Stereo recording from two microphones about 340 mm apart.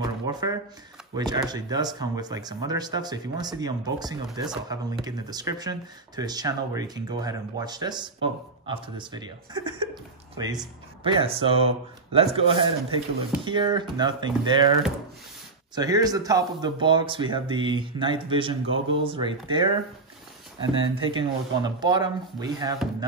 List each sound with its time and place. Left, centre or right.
0.0 s a sound: centre
1.1 s speech: centre
11.1 s speech: centre
15.7 s speech: centre
20.7 s speech: centre